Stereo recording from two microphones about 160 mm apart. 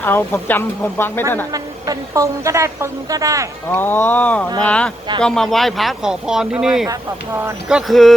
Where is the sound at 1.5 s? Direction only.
20° right (ahead or behind).